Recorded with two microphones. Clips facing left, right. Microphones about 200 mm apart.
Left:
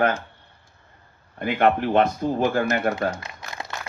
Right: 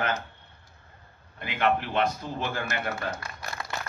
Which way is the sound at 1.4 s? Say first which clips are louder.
Left 6 dB; 45° left (ahead or behind).